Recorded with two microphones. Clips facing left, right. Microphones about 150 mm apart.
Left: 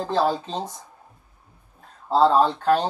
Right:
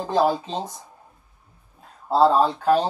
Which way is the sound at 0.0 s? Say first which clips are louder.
Right 2 dB; 15° right (ahead or behind).